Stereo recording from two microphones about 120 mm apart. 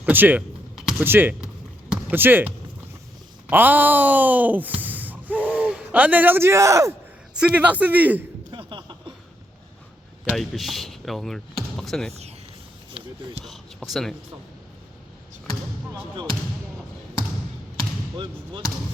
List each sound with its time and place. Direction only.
0.0 s speech: 15° right (ahead or behind)
0.8 s a sound: 5° right (ahead or behind)
1.0 s speech: 15° right (ahead or behind)
1.9 s basketball bounce: 15° right (ahead or behind)
3.5 s a sound: 15° right (ahead or behind)
7.3 s speech: 10° right (ahead or behind)
8.4 s a sound: 40° right (ahead or behind)
10.3 s speech: centre (ahead or behind)
13.4 s speech: centre (ahead or behind)